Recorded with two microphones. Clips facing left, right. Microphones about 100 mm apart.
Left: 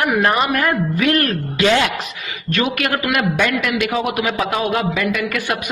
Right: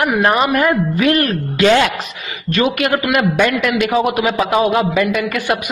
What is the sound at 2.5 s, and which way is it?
A man's voice, 20° right (ahead or behind).